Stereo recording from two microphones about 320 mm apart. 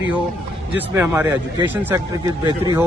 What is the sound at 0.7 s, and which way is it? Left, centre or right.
Speech, centre.